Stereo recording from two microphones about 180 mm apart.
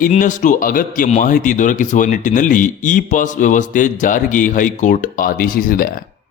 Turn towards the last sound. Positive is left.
turn(degrees=55)  # may be behind; listen again after turning